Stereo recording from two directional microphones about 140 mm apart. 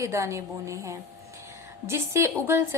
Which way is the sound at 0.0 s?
20° right (ahead or behind).